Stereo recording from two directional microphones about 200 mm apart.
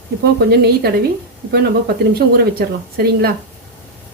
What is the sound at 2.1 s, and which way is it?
A woman's voice, 50° right (ahead or behind).